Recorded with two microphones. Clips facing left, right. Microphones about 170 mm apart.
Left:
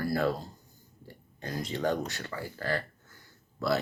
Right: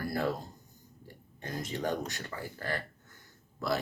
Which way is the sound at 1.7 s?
15° right (ahead or behind).